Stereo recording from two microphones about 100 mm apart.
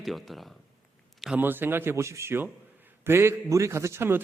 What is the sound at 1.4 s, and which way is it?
A man's voice, 20° right (ahead or behind).